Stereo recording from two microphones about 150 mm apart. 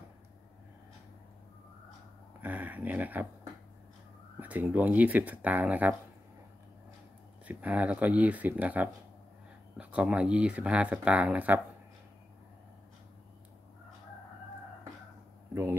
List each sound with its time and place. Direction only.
2.4 s speech: 10° right (ahead or behind)
4.4 s speech: 10° right (ahead or behind)
7.4 s speech: 10° right (ahead or behind)
15.5 s a sound: 20° right (ahead or behind)